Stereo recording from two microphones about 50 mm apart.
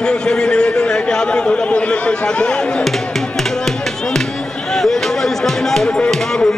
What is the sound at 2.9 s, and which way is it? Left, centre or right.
Music, centre.